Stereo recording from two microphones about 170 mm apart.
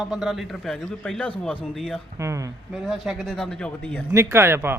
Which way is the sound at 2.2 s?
15° right (ahead or behind).